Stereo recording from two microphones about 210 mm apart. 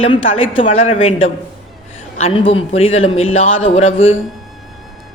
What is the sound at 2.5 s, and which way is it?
A woman's voice, 30° left (ahead or behind).